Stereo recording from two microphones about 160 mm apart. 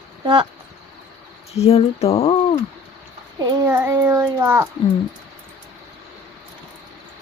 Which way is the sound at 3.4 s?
25° right (ahead or behind).